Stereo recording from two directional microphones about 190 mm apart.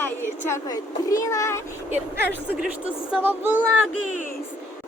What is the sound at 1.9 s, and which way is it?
Speech, 10° right (ahead or behind).